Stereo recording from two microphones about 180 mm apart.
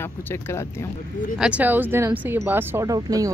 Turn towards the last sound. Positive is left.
turn(degrees=-20)  # may be behind; listen again after turning